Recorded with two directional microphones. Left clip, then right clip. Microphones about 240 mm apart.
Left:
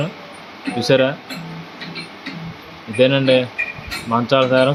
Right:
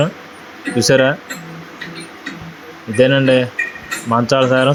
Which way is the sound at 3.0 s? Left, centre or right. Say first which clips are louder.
Right 2 dB; centre.